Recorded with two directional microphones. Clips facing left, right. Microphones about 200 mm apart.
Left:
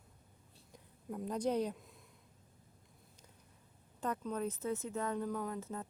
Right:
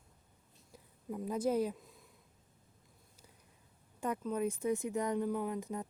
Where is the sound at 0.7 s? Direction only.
5° right (ahead or behind).